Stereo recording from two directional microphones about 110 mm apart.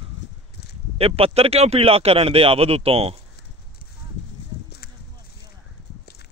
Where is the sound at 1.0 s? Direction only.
65° right (ahead or behind).